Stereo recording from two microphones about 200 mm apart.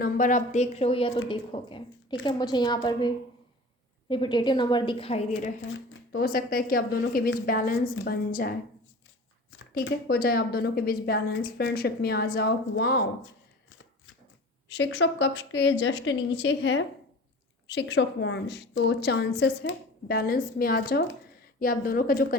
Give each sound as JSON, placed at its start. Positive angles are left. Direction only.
{"t": 0.0, "sound": "a woman's voice", "side_deg": 40}
{"t": 4.1, "sound": "a woman's voice", "side_deg": 25}
{"t": 5.6, "sound": "a woman's voice", "side_deg": 60}
{"t": 9.6, "sound": "a woman's voice", "side_deg": 60}
{"t": 14.7, "sound": "a woman's voice", "side_deg": 65}